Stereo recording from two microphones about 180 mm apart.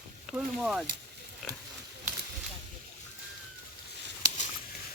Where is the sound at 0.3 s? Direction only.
Centre (ahead or behind).